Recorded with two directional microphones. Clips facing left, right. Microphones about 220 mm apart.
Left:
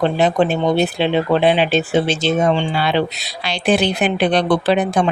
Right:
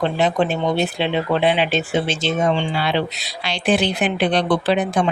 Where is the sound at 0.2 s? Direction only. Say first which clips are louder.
Left 3 dB; 40° left (ahead or behind).